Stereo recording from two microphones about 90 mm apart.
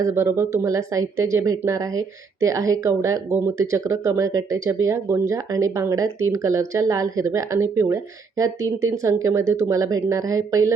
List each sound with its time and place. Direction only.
0.0 s speech: 30° right (ahead or behind)